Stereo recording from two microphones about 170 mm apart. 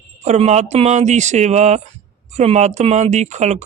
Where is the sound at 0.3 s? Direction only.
40° right (ahead or behind).